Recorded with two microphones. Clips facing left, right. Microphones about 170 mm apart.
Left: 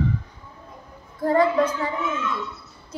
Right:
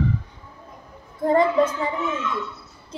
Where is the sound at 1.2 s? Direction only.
20° right (ahead or behind).